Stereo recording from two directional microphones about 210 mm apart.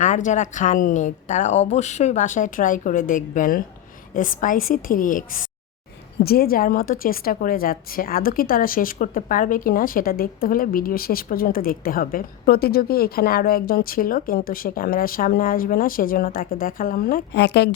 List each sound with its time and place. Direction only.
0.0 s a woman's voice: 35° left (ahead or behind); by 17.7 s 55° left (ahead or behind)